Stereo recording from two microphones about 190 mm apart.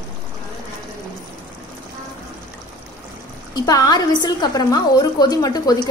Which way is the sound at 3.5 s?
20° left (ahead or behind).